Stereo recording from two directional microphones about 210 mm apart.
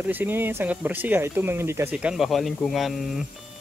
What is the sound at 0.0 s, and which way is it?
Speech, 10° right (ahead or behind).